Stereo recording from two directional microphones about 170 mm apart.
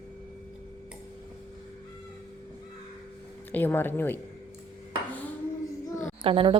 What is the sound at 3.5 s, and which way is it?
Speech, 10° left (ahead or behind).